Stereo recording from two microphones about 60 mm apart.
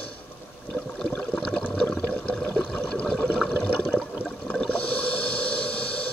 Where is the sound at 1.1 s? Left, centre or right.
Left.